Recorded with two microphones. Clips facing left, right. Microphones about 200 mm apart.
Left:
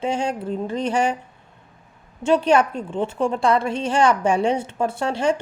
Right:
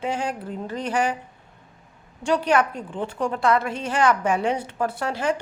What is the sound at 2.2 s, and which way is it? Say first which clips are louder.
Speech: left 4 dB; 25° left (ahead or behind).